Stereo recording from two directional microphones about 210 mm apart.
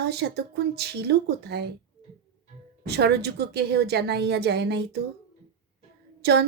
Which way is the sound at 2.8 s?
50° right (ahead or behind).